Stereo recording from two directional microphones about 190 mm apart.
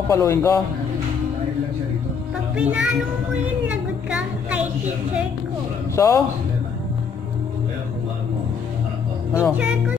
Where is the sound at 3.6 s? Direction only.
5° right (ahead or behind).